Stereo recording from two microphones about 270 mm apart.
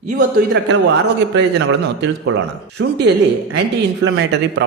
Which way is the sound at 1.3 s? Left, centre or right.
Right.